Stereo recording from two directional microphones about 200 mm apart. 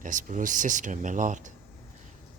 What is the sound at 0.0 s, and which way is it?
Speech, 40° right (ahead or behind).